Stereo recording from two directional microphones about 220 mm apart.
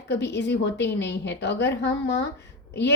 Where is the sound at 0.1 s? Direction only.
50° left (ahead or behind).